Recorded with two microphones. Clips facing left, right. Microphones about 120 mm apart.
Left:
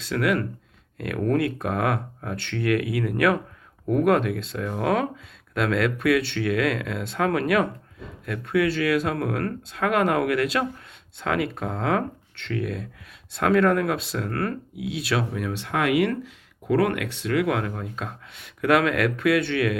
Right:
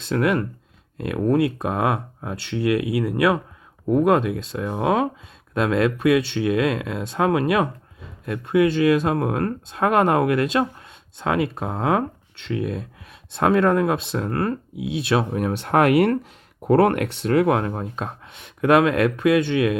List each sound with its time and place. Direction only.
0.1 s speech: 25° right (ahead or behind)
15.3 s speech: 45° right (ahead or behind); by 19.7 s 20° right (ahead or behind)